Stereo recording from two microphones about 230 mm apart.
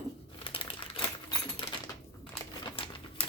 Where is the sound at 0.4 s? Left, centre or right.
Left.